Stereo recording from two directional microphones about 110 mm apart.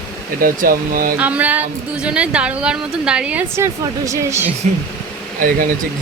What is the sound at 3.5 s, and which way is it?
Speech, 25° right (ahead or behind).